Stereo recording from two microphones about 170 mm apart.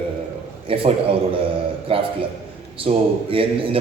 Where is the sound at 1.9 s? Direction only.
35° right (ahead or behind).